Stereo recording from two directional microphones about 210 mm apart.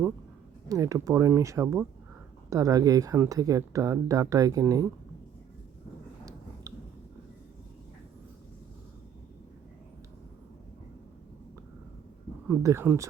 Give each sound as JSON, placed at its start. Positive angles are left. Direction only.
{"t": 0.7, "sound": "speech", "side_deg": -15}
{"t": 6.7, "sound": "a sound", "side_deg": -15}
{"t": 12.5, "sound": "speech", "side_deg": -10}